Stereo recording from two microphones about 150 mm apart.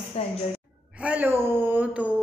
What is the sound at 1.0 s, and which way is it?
Speech, 10° right (ahead or behind).